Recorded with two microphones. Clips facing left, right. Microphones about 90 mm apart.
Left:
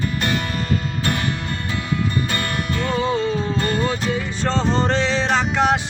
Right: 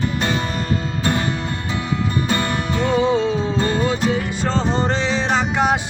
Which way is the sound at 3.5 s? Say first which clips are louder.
Right 2 dB; 20° right (ahead or behind).